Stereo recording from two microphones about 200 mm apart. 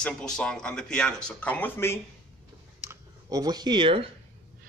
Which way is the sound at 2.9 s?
15° right (ahead or behind).